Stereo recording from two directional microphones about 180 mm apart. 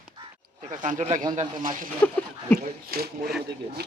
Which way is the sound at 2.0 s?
10° left (ahead or behind).